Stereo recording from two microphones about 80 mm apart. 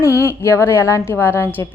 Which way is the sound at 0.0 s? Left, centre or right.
Left.